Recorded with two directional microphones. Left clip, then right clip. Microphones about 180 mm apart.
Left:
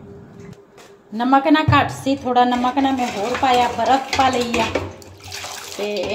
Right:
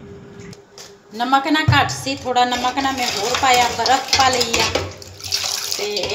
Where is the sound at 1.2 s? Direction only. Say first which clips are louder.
Left 1 dB; 50° left (ahead or behind).